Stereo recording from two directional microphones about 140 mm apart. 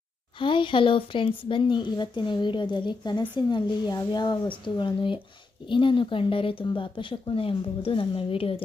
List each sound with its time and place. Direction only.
0.3 s speech: 35° left (ahead or behind)